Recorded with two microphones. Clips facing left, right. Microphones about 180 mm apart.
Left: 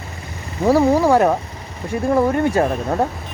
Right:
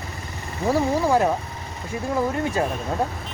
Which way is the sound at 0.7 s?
70° left (ahead or behind).